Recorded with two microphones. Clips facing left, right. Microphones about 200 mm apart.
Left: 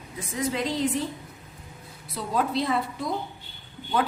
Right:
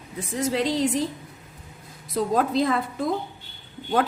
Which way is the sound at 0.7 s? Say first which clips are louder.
Right 3 dB; 85° right.